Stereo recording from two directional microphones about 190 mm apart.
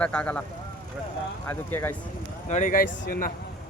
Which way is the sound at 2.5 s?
40° left (ahead or behind).